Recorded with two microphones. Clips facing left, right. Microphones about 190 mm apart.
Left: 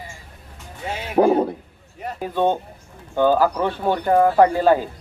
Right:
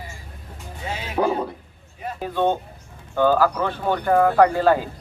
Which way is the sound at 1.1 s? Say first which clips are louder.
Left 6 dB; 45° left (ahead or behind).